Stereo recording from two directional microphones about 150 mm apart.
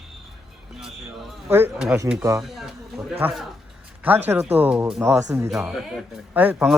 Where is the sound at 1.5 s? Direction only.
15° right (ahead or behind).